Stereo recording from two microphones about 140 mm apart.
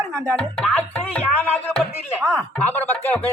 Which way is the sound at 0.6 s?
10° left (ahead or behind).